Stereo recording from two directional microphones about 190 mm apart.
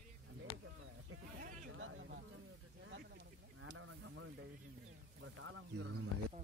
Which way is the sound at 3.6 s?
90° right.